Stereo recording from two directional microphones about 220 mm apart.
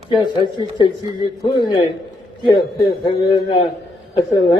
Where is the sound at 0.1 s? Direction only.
20° left (ahead or behind).